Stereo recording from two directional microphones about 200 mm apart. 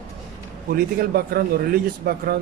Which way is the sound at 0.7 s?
50° right (ahead or behind).